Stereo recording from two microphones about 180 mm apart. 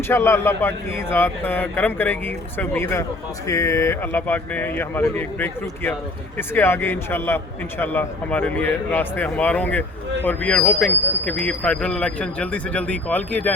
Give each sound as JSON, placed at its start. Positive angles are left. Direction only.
{"t": 0.1, "sound": "speech", "side_deg": 15}